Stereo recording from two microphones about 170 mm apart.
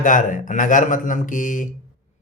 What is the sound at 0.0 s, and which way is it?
Speech, 50° left (ahead or behind).